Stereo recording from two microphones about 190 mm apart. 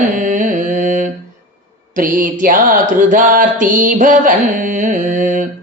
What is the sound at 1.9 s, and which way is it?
Mantra, 45° right (ahead or behind).